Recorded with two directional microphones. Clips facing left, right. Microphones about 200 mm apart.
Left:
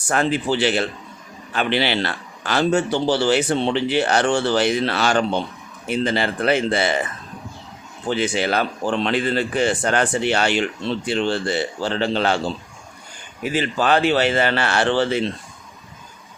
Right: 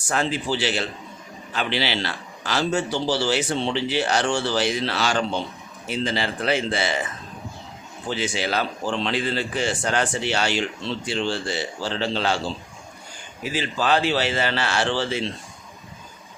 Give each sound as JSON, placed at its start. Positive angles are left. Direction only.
{"t": 0.1, "sound": "a man's voice", "side_deg": 55}
{"t": 8.1, "sound": "a man's voice", "side_deg": 55}
{"t": 13.4, "sound": "a man's voice", "side_deg": 55}